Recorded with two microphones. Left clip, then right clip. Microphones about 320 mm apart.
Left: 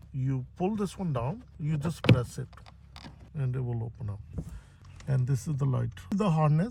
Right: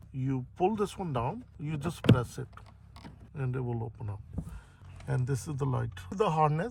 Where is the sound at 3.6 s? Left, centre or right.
Right.